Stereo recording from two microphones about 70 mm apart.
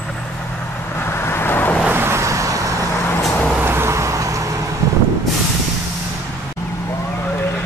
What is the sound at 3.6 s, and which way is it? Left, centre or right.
Vehicle, right.